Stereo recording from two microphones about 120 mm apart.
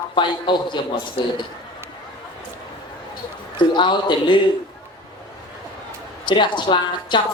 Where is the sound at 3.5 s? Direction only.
40° left (ahead or behind).